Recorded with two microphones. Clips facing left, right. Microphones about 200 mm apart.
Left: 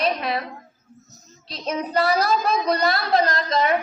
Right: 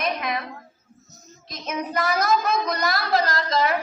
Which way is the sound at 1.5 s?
35° left (ahead or behind).